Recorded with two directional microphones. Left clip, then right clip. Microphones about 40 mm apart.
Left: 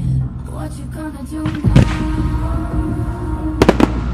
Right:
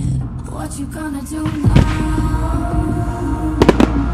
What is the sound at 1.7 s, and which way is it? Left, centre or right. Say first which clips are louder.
Music: left 2 dB; centre.